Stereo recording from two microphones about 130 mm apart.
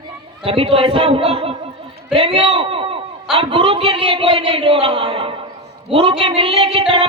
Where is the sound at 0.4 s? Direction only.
45° right (ahead or behind).